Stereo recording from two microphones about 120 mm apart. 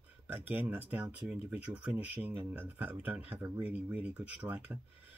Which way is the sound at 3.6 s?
10° right (ahead or behind).